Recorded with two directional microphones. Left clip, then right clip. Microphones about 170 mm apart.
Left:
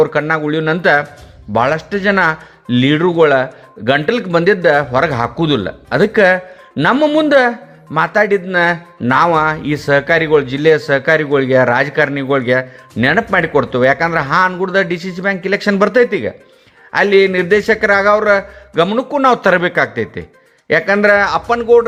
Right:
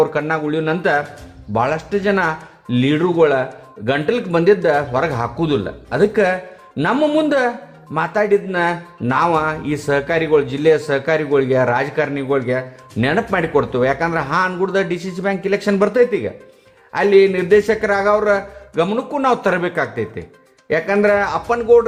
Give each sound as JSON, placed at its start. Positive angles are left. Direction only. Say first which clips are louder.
{"t": 0.0, "sound": "speech", "louder": "left 4 dB", "side_deg": 20}